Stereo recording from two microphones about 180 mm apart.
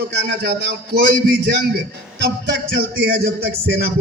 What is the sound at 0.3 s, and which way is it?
A man's voice, 65° right (ahead or behind).